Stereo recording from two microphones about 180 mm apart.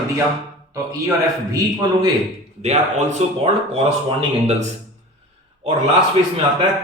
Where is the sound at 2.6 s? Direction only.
40° right (ahead or behind).